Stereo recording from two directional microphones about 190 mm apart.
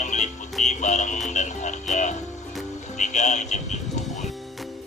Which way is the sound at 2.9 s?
40° left (ahead or behind).